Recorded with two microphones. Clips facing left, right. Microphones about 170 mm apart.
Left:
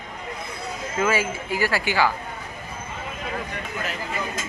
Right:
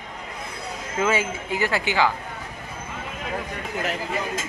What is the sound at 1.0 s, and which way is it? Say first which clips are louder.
Speech: even; 20° right (ahead or behind).